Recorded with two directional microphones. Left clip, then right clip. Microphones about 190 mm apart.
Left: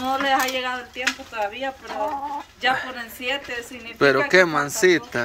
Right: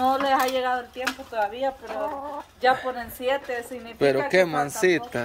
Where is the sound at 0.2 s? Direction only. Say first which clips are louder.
Left 1 dB; 40° right (ahead or behind).